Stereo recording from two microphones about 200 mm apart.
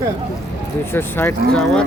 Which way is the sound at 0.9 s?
10° left (ahead or behind).